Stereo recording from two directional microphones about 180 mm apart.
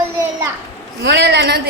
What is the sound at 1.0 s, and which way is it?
Speech, 70° right (ahead or behind).